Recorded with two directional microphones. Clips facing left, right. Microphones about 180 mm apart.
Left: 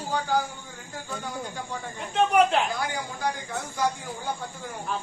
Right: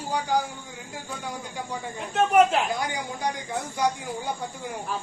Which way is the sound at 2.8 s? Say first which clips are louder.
Right 1 dB; 20° right (ahead or behind).